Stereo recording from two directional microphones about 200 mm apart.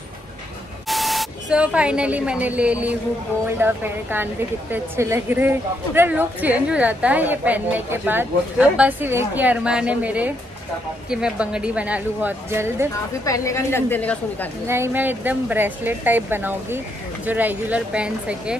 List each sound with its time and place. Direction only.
0.8 s a woman's voice: centre (ahead or behind)
13.2 s a woman's voice: 15° left (ahead or behind)
14.7 s a woman's voice: 10° right (ahead or behind)